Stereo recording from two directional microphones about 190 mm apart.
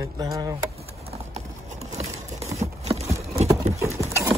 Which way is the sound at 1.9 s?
30° right (ahead or behind).